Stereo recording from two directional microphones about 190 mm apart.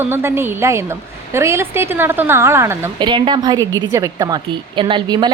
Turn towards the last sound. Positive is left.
turn(degrees=-25)  # may be behind; listen again after turning